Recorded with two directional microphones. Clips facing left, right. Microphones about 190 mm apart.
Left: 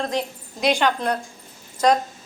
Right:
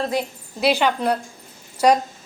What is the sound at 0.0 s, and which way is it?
Speech, 5° right (ahead or behind).